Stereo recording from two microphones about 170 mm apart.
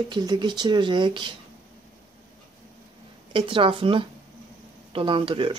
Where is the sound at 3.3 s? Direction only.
30° right (ahead or behind).